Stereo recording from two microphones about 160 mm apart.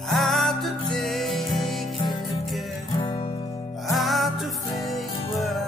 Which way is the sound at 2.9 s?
30° left (ahead or behind).